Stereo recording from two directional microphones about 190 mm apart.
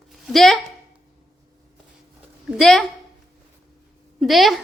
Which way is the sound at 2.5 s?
Centre (ahead or behind).